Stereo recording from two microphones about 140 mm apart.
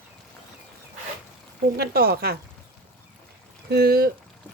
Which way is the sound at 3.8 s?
90° right.